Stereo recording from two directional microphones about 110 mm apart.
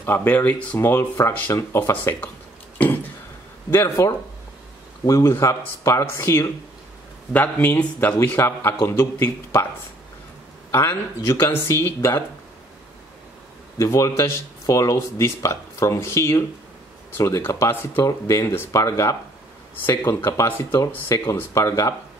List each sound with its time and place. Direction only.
0.0 s speech: 20° left (ahead or behind)
5.0 s speech: 30° left (ahead or behind)
10.7 s speech: 25° left (ahead or behind)
13.7 s speech: 30° left (ahead or behind)
20.7 s speech: 35° left (ahead or behind)